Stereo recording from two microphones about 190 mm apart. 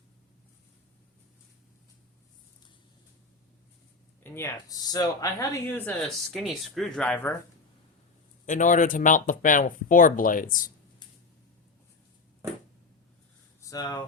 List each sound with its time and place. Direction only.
4.2 s speech: 10° left (ahead or behind)
8.4 s speech: 40° left (ahead or behind)
13.6 s speech: 20° left (ahead or behind)